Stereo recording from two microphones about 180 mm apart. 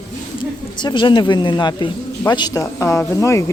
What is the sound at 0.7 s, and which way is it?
Speech, 25° left (ahead or behind).